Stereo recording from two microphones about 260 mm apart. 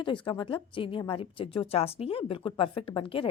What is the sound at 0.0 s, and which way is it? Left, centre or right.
A woman's voice, centre.